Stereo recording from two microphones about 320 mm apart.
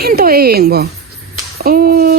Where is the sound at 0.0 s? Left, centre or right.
Right.